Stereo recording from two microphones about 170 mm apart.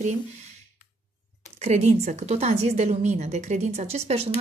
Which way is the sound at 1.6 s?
40° right (ahead or behind).